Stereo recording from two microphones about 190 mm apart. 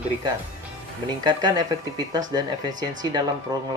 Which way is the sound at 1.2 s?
20° right (ahead or behind).